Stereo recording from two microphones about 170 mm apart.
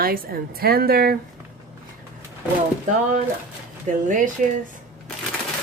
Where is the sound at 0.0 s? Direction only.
60° right (ahead or behind).